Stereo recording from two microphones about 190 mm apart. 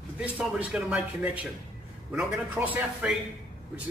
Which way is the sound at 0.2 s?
5° right (ahead or behind).